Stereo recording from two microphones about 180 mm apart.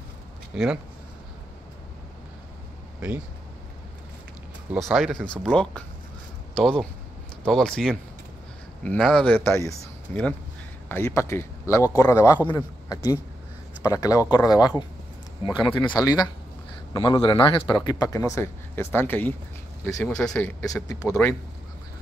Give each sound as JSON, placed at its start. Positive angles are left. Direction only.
{"t": 0.5, "sound": "speech", "side_deg": -5}
{"t": 4.7, "sound": "a man's voice", "side_deg": 0}
{"t": 20.6, "sound": "a man's voice", "side_deg": 20}